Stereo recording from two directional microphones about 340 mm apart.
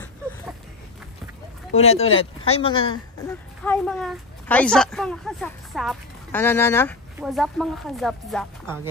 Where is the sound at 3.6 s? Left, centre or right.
Centre.